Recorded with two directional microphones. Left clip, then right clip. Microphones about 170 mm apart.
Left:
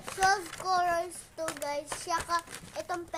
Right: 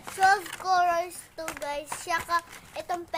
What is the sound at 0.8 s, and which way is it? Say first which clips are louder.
Child singing: right 4 dB; centre (ahead or behind).